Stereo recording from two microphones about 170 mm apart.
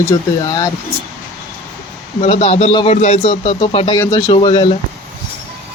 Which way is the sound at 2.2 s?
40° left (ahead or behind).